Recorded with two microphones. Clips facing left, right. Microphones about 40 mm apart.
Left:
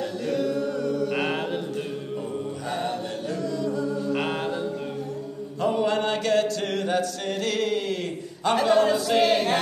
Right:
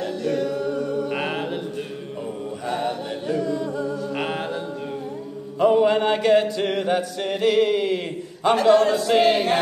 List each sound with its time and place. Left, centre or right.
0.2 s chant: centre
0.5 s music: centre
1.1 s music: centre
2.7 s music: centre
3.3 s music: right
3.9 s music: centre
5.6 s chant: centre
8.5 s a man's voice: centre
9.0 s choir: centre